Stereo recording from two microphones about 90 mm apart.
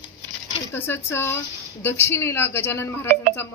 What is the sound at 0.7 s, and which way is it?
A woman's voice, 25° left (ahead or behind).